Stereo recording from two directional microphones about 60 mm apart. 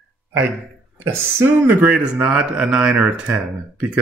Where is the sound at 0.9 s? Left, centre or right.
Right.